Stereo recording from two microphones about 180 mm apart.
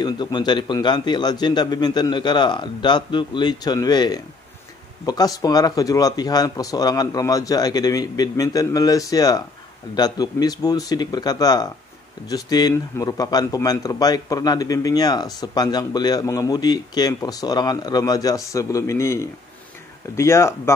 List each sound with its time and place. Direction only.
0.0 s a man's voice: 25° left (ahead or behind)